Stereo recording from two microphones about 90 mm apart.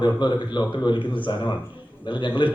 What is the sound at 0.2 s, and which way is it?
Speech, 60° left (ahead or behind).